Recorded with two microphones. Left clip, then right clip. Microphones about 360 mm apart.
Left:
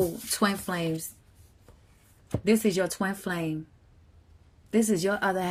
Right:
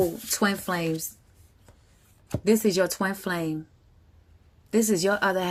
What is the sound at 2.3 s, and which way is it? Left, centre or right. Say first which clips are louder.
Speech: right 2 dB; centre.